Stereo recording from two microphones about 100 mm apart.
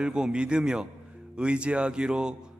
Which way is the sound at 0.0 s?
10° right (ahead or behind).